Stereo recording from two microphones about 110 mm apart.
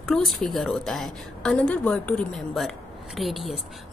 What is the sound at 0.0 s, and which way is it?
A woman's voice, centre (ahead or behind).